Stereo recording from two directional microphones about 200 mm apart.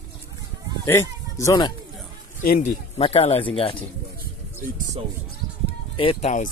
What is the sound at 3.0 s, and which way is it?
Speech, 30° left (ahead or behind).